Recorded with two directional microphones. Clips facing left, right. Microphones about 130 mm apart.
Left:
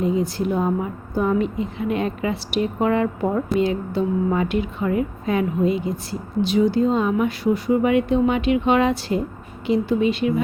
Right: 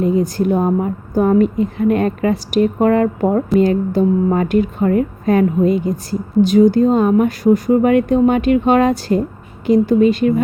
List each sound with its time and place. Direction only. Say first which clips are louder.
0.0 s a woman's voice: right 5 dB; 50° right (ahead or behind)